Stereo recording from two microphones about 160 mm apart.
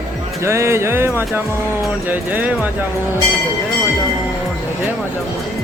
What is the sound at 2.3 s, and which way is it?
Speech, 10° right (ahead or behind).